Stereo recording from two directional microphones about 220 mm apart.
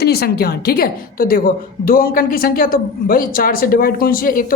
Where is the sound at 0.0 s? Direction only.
45° left (ahead or behind).